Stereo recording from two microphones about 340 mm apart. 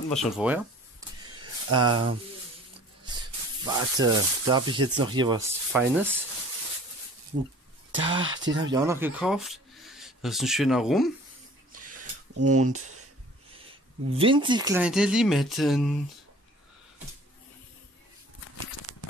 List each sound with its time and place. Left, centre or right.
0.1 s speech: centre
1.2 s a sound: centre
3.6 s speech: centre
5.7 s speech: centre
7.9 s speech: right
8.7 s speech: centre
11.7 s a sound: right
12.0 s a sound: right
14.1 s speech: centre
18.9 s crumpling: right